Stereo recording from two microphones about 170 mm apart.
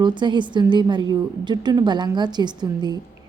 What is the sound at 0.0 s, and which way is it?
A woman's voice, 25° right (ahead or behind).